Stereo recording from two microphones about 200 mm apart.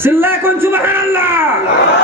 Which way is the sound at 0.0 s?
10° right (ahead or behind).